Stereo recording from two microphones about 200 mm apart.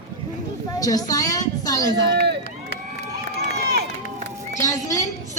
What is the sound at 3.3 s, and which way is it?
Run, 55° right (ahead or behind).